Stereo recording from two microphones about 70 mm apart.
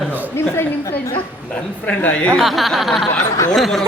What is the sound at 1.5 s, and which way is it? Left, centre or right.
Speech, left.